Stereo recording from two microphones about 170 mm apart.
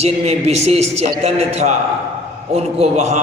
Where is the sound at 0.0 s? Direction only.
40° right (ahead or behind).